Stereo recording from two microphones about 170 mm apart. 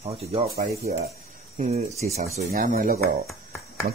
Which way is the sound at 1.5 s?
40° right (ahead or behind).